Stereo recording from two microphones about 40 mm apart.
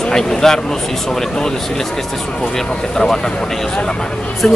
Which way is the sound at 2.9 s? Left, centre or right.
Centre.